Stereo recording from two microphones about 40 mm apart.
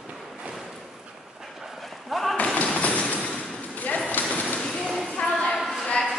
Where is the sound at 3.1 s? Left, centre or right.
Left.